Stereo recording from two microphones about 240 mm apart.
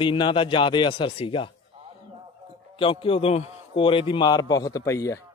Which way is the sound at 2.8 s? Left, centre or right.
Left.